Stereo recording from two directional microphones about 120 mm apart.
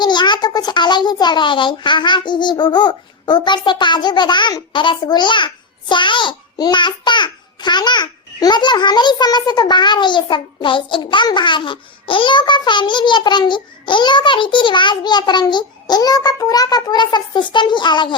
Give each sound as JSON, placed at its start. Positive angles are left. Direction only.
{"t": 0.0, "sound": "a child's voice", "side_deg": 40}